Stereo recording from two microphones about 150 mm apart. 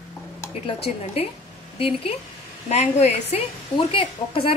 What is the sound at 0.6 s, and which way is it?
A woman's voice, 40° left (ahead or behind).